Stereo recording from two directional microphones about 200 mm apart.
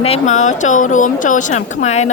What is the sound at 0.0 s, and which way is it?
A woman's voice, 35° left (ahead or behind).